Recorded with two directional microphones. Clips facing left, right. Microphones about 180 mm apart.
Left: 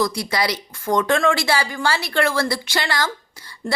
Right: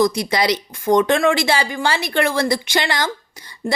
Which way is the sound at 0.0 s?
20° right (ahead or behind).